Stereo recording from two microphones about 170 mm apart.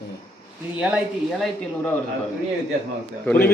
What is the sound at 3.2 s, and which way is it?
Speech, 10° left (ahead or behind).